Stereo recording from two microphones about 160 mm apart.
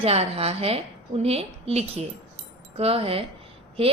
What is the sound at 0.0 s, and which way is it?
Speech, 40° right (ahead or behind).